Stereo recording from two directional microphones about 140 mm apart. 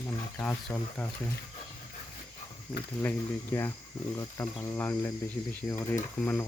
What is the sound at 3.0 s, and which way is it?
Speech, 15° left (ahead or behind).